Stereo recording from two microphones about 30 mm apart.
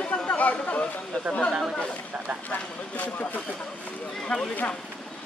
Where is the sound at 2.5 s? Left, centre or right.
Left.